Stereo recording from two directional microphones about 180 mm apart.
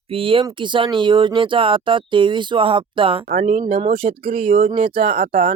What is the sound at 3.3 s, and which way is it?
Speech, 40° right (ahead or behind).